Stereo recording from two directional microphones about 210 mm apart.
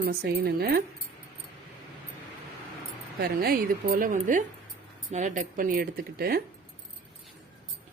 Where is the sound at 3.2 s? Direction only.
45° right (ahead or behind).